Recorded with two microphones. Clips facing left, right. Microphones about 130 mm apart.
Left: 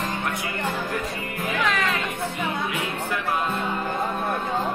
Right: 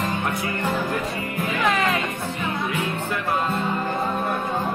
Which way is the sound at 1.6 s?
35° right (ahead or behind).